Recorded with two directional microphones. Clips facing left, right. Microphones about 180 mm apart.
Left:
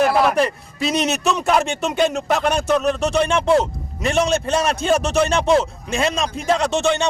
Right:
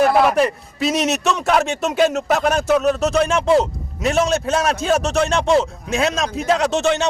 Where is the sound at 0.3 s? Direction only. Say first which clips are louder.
Right 1 dB; 5° right (ahead or behind).